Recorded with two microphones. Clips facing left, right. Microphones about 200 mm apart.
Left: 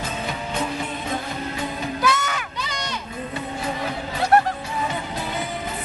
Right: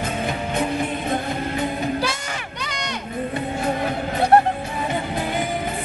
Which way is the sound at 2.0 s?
30° right (ahead or behind).